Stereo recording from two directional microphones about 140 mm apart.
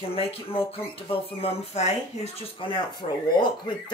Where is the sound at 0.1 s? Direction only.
45° left (ahead or behind).